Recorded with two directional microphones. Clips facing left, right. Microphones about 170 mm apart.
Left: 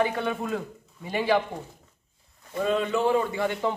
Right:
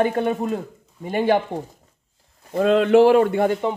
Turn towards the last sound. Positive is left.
turn(degrees=-60)  # may be behind; listen again after turning